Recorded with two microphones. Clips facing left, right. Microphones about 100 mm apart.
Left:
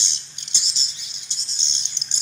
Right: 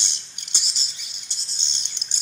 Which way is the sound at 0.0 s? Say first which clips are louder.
Left 1 dB; 50° right (ahead or behind).